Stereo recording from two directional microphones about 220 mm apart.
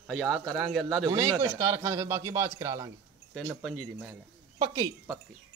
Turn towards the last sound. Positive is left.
turn(degrees=-15)  # may be behind; listen again after turning